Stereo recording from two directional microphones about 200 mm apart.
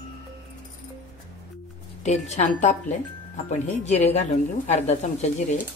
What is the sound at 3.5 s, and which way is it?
A woman's voice, 35° left (ahead or behind).